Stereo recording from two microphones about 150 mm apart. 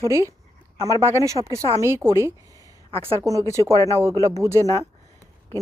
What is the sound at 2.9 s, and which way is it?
Speech, 40° right (ahead or behind).